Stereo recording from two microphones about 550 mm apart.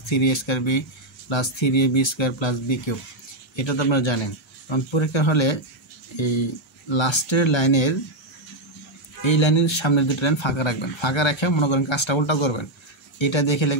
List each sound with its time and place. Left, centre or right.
0.2 s speech: left
9.2 s speech: left